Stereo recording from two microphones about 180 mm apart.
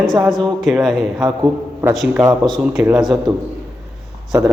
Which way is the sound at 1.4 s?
15° right (ahead or behind).